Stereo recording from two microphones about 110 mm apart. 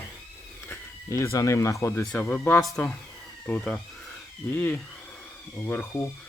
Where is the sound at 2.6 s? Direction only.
5° left (ahead or behind).